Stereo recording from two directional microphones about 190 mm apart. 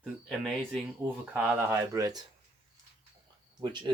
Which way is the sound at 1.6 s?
15° right (ahead or behind).